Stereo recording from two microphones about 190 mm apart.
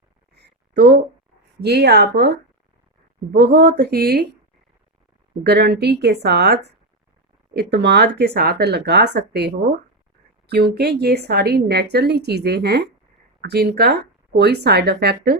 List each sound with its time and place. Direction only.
0.3 s a sound: 60° right (ahead or behind)
1.6 s a woman's voice: 60° right (ahead or behind)
5.4 s a woman's voice: 60° right (ahead or behind)